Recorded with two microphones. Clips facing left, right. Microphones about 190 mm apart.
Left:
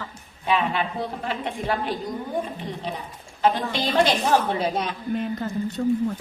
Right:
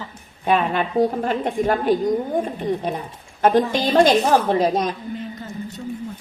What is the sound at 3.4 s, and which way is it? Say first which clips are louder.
A woman's voice: right 6 dB; 50° right (ahead or behind).